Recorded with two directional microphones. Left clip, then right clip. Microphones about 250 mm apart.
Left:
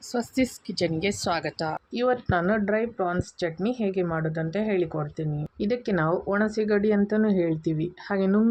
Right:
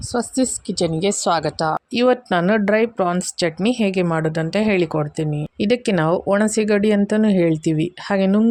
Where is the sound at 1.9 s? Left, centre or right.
Right.